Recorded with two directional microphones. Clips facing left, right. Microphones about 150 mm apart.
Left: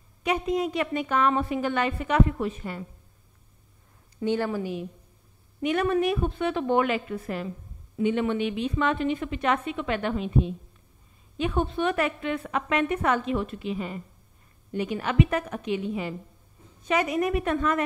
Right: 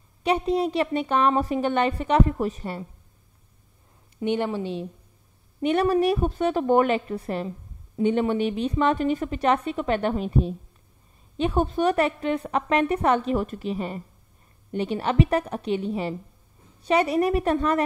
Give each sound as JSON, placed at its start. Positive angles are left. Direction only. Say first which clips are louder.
{"t": 0.2, "sound": "a woman's voice", "louder": "right 3 dB", "side_deg": -30}
{"t": 4.2, "sound": "a woman's voice", "louder": "right 1 dB", "side_deg": -20}